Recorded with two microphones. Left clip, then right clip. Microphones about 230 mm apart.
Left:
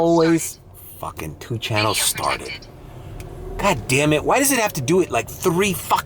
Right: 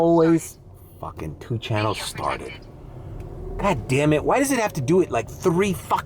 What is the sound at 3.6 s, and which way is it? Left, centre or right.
Speech, centre.